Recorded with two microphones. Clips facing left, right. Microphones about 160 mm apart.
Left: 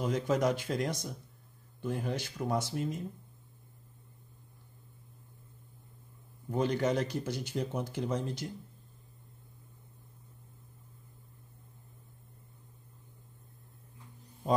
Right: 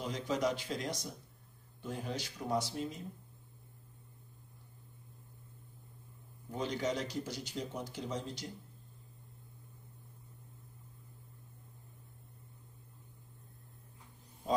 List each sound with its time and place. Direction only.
0.0 s speech: 50° left (ahead or behind)
6.5 s speech: 55° left (ahead or behind)